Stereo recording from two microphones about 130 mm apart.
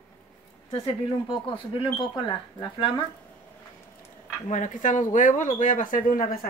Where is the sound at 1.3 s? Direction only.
40° left (ahead or behind).